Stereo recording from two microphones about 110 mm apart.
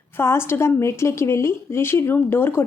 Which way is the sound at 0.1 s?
25° left (ahead or behind).